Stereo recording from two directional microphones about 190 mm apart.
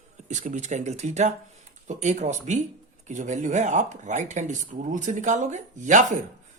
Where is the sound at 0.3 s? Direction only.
40° right (ahead or behind).